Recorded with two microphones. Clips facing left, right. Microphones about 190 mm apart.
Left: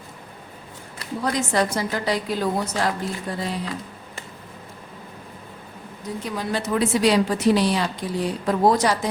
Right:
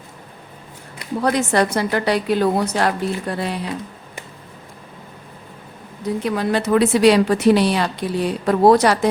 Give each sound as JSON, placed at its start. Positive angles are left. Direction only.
{"t": 1.2, "sound": "a woman's voice", "side_deg": -65}
{"t": 6.2, "sound": "a woman's voice", "side_deg": -65}